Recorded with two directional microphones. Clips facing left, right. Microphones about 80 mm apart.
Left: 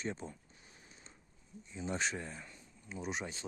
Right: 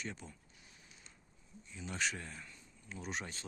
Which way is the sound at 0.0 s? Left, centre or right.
Left.